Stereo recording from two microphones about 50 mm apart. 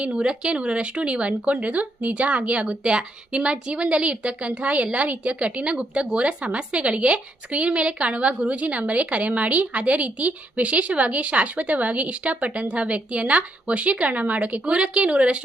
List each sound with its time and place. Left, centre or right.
0.0 s a woman's voice: right